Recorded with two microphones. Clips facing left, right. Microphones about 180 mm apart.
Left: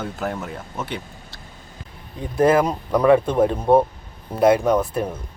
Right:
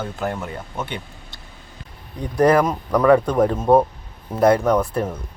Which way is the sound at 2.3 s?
25° left (ahead or behind).